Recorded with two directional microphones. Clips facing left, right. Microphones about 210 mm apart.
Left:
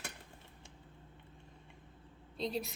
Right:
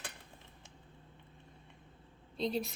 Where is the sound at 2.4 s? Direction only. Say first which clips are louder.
Right 3 dB; centre (ahead or behind).